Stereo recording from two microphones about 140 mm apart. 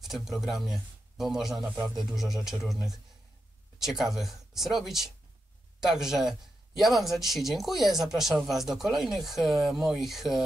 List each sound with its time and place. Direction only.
0.0 s speech: centre (ahead or behind)
1.8 s music: 30° right (ahead or behind)
2.1 s speech: centre (ahead or behind)